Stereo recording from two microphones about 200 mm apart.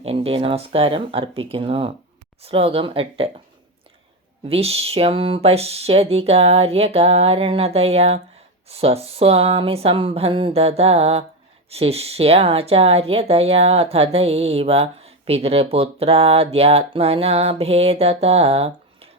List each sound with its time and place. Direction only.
0.0 s speech: 30° right (ahead or behind)
4.4 s speech: 30° right (ahead or behind)